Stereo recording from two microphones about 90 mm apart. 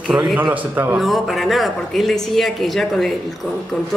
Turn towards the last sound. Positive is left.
turn(degrees=0)  # may be behind; listen again after turning